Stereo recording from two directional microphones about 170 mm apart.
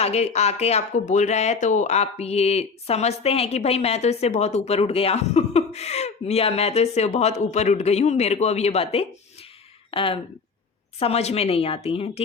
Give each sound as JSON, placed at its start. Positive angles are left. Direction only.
{"t": 0.0, "sound": "speech", "side_deg": 40}